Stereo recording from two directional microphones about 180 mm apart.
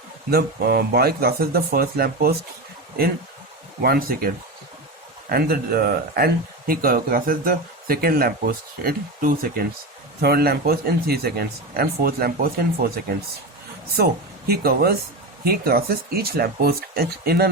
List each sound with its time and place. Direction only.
0.3 s speech: 60° right (ahead or behind)
3.8 s speech: 55° right (ahead or behind)
5.3 s speech: 60° right (ahead or behind)
13.9 s speech: 60° right (ahead or behind)